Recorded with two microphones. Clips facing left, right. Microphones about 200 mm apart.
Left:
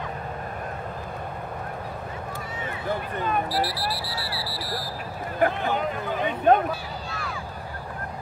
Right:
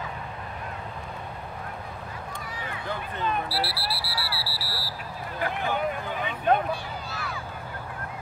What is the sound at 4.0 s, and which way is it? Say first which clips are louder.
Vehicle: left 2 dB; 10° right (ahead or behind).